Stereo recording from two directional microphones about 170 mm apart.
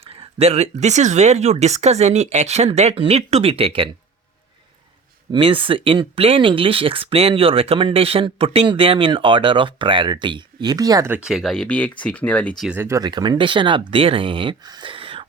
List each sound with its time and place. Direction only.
0.0 s speech: 35° right (ahead or behind)
5.3 s speech: 30° right (ahead or behind)
11.2 s speech: centre (ahead or behind)
12.7 s speech: 15° right (ahead or behind); by 15.3 s 30° right (ahead or behind)